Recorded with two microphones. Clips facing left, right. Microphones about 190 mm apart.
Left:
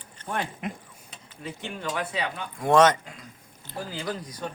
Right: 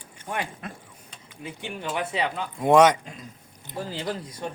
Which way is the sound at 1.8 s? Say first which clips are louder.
Right 3 dB; 20° right (ahead or behind).